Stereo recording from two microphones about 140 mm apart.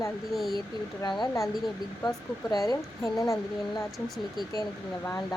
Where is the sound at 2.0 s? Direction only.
25° left (ahead or behind).